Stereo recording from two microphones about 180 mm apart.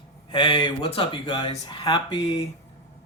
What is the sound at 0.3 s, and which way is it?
Speech, 25° left (ahead or behind).